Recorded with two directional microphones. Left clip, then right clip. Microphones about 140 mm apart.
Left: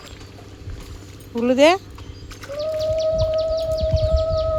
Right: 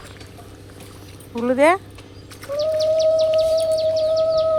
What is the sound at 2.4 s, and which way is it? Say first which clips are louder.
Bird: right 5 dB; 20° right (ahead or behind).